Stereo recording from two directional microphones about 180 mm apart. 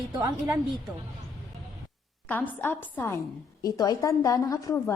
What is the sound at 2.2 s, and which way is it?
A woman's voice, 10° left (ahead or behind).